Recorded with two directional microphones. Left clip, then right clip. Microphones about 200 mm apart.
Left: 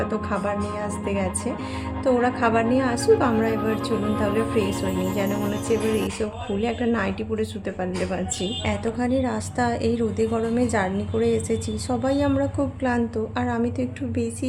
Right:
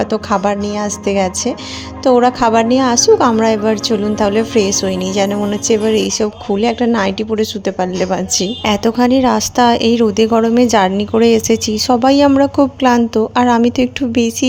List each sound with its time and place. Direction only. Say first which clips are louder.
0.0 s speech: right 11 dB; 35° right (ahead or behind)